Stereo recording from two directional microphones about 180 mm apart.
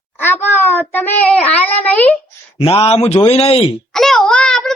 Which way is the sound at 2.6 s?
30° left (ahead or behind).